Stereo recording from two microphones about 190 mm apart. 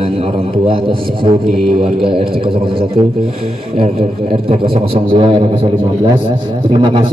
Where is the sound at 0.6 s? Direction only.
25° right (ahead or behind).